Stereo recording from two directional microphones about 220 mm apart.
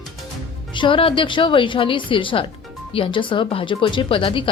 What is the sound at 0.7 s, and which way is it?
A woman's voice, 20° left (ahead or behind).